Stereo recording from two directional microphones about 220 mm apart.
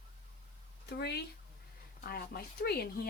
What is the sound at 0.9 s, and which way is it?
Speech, 50° left (ahead or behind).